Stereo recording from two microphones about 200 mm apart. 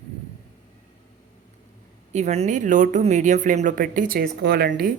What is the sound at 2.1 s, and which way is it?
Speech, 35° right (ahead or behind).